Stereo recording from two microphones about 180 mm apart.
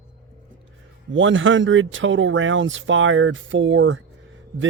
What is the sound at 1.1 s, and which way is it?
Speech, 90° right.